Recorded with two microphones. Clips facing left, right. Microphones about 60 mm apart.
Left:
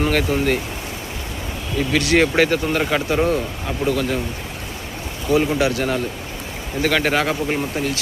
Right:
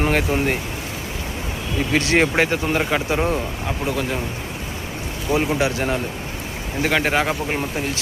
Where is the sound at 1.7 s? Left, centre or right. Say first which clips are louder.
Left 1 dB; right.